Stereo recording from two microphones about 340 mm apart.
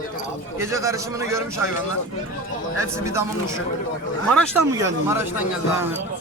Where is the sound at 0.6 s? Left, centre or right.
Centre.